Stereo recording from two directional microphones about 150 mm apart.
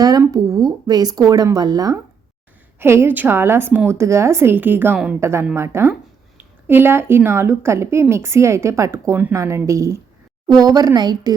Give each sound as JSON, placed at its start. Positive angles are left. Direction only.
{"t": 0.0, "sound": "a woman's voice", "side_deg": -25}